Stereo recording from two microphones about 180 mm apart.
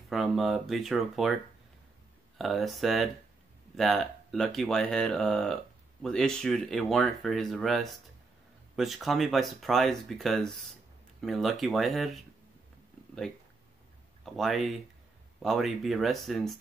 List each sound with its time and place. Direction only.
0.1 s speech: centre (ahead or behind)
2.3 s speech: centre (ahead or behind)
14.2 s speech: centre (ahead or behind)